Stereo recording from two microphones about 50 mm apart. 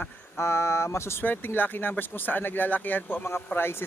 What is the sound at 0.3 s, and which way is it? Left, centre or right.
Speech, left.